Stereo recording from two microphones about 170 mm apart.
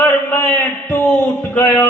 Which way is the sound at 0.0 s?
15° left (ahead or behind).